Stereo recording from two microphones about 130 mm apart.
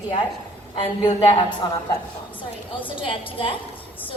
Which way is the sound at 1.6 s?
35° left (ahead or behind).